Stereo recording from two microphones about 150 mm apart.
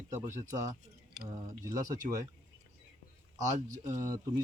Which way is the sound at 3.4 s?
25° right (ahead or behind).